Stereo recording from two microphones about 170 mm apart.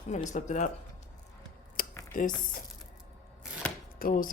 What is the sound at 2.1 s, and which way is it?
Speech, 55° left (ahead or behind).